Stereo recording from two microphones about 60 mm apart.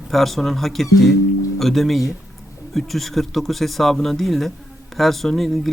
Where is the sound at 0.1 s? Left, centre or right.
Centre.